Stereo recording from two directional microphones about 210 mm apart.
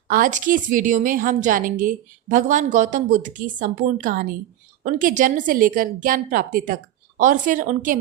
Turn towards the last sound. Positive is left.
turn(degrees=-40)  # may be behind; listen again after turning